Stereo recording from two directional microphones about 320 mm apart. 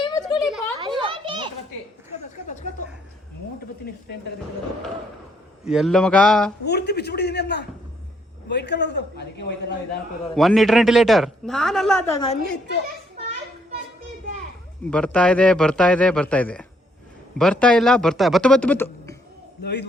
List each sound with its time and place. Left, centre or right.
0.0 s a sound: centre
0.4 s a sound: centre
0.8 s children playing: centre
5.6 s speech: centre
6.7 s a man's voice: left
10.3 s speech: centre
12.5 s a man's voice: left
14.8 s speech: centre
19.6 s a man's voice: left